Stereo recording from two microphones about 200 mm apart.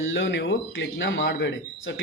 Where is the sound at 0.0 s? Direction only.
65° left (ahead or behind).